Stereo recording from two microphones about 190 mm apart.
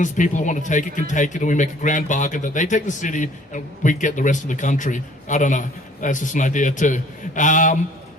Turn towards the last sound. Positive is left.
turn(degrees=40)  # may be behind; listen again after turning